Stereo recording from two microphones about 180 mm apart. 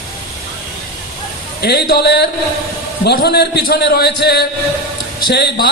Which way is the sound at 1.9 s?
65° left (ahead or behind).